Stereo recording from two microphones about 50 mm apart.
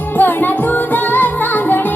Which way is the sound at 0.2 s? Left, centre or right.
Left.